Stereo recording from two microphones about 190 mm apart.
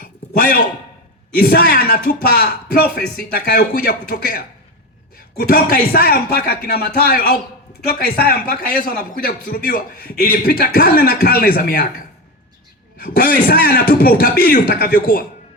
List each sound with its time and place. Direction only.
0.0 s a sound: 50° left (ahead or behind)
1.4 s a man's voice: 50° left (ahead or behind)
13.0 s a man's voice: 50° left (ahead or behind)